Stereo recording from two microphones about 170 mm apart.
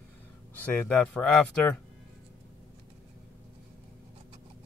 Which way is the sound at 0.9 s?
10° left (ahead or behind).